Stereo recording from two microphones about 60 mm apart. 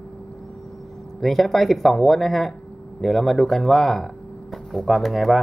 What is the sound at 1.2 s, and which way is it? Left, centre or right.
Speech, centre.